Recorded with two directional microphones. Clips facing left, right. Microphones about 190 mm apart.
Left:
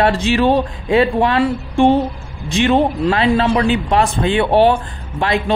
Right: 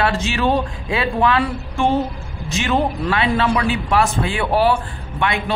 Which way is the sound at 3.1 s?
35° left (ahead or behind).